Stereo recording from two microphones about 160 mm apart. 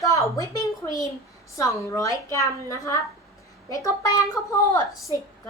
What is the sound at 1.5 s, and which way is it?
A woman's voice, 20° left (ahead or behind).